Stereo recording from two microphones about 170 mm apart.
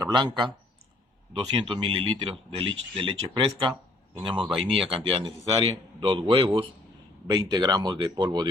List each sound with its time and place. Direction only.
0.0 s speech: 25° right (ahead or behind)
1.3 s speech: 25° right (ahead or behind)
4.4 s speech: centre (ahead or behind)
4.9 s speech: 30° right (ahead or behind)